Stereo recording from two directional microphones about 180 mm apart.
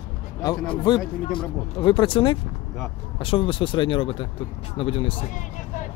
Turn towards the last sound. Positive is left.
turn(degrees=30)  # may be behind; listen again after turning